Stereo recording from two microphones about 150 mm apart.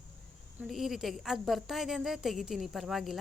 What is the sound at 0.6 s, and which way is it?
A woman's voice, centre (ahead or behind).